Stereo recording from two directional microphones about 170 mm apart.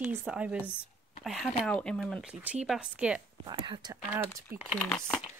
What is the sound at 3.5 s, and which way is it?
Speech, 25° right (ahead or behind).